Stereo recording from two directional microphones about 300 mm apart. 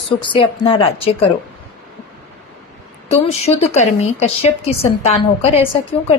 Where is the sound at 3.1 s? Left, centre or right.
Left.